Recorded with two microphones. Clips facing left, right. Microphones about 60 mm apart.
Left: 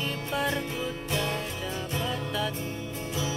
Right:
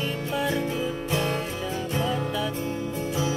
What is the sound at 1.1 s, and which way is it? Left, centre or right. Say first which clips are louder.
Music: right 3 dB; right.